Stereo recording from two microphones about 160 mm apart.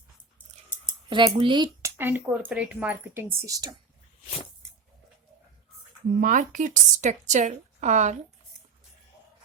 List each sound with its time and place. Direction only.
1.1 s speech: 30° right (ahead or behind)
2.0 s speech: 15° right (ahead or behind)
6.1 s a woman's voice: 55° right (ahead or behind)